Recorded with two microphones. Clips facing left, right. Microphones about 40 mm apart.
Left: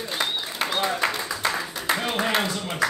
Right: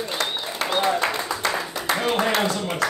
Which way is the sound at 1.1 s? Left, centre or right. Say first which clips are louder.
Right 2 dB; right.